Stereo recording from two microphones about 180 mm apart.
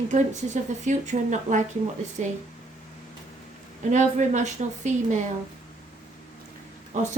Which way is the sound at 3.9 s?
40° right (ahead or behind).